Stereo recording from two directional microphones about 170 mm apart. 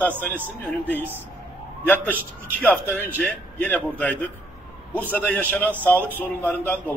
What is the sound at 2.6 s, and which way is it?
A man's voice, 10° left (ahead or behind).